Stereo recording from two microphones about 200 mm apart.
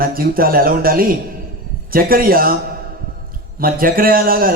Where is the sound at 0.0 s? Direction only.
45° right (ahead or behind).